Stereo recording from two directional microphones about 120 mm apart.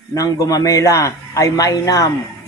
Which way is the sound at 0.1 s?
30° left (ahead or behind).